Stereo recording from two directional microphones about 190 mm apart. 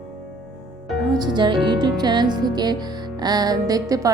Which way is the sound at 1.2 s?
25° right (ahead or behind).